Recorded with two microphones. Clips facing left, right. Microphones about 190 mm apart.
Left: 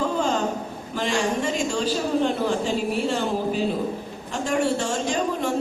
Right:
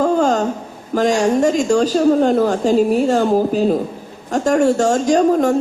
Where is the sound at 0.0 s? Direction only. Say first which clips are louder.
Right 8 dB; 45° right (ahead or behind).